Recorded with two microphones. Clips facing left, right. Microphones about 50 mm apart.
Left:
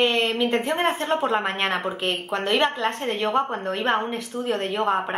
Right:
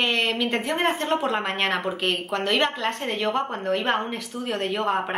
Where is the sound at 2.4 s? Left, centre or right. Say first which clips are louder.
Left 2 dB; centre.